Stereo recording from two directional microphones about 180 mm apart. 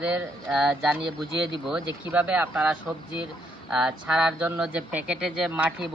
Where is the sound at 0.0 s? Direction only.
5° right (ahead or behind).